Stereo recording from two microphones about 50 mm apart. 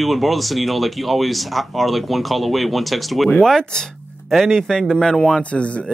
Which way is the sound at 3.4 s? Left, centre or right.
Centre.